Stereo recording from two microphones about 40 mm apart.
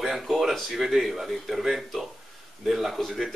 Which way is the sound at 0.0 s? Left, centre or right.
Centre.